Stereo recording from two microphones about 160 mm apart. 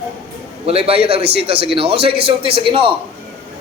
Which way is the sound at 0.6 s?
40° right (ahead or behind).